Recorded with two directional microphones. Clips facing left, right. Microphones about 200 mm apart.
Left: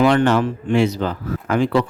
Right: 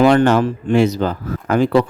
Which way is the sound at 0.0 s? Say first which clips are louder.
Right 3 dB; 45° right (ahead or behind).